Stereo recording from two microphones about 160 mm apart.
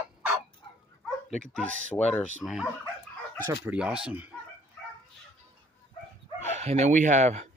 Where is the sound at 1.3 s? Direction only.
5° left (ahead or behind).